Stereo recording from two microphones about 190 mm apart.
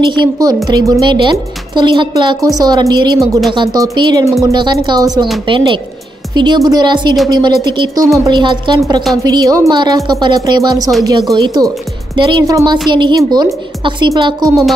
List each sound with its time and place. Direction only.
0.2 s speech: 20° right (ahead or behind)
3.2 s speech: centre (ahead or behind)
3.5 s speech: 20° right (ahead or behind)